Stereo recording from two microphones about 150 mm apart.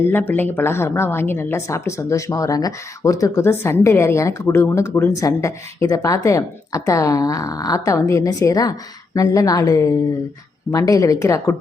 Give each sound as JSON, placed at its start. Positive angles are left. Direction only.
{"t": 0.1, "sound": "a woman's voice", "side_deg": 10}